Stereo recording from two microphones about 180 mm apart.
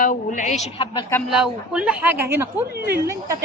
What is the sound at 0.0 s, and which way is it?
Speech, 45° left (ahead or behind).